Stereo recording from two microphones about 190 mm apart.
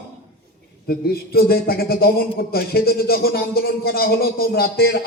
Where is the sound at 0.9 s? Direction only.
55° left (ahead or behind).